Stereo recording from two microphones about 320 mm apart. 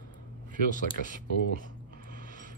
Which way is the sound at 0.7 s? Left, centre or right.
Left.